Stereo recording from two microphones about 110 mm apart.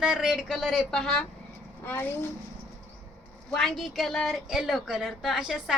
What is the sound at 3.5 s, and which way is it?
A woman's voice, 5° left (ahead or behind).